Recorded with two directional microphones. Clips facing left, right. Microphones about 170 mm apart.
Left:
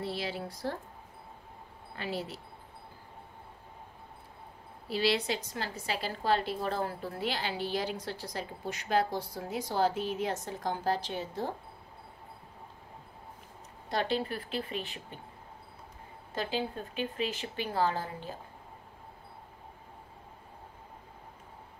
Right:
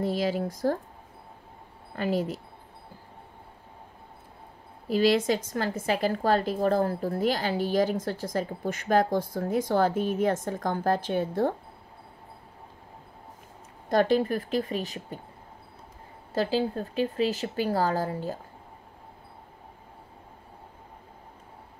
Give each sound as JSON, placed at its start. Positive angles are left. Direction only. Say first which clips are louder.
{"t": 0.0, "sound": "a woman's voice", "louder": "right 9 dB", "side_deg": -45}
{"t": 2.0, "sound": "a woman's voice", "louder": "right 9 dB", "side_deg": -45}
{"t": 4.8, "sound": "a woman's voice", "louder": "right 7 dB", "side_deg": -45}
{"t": 13.8, "sound": "a woman's voice", "louder": "right 9 dB", "side_deg": -45}
{"t": 16.3, "sound": "speech", "louder": "right 8 dB", "side_deg": -35}